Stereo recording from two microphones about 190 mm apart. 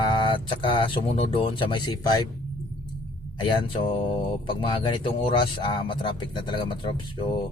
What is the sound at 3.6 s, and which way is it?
Speech, 25° left (ahead or behind).